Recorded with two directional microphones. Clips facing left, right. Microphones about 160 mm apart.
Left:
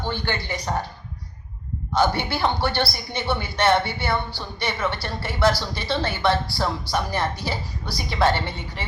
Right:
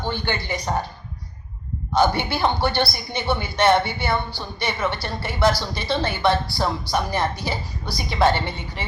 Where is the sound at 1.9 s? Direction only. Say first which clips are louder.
Right 2 dB; 15° right (ahead or behind).